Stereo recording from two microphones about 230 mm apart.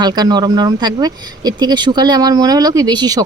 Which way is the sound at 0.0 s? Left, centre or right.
Centre.